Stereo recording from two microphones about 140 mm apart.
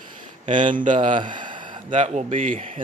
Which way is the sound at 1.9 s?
50° right (ahead or behind).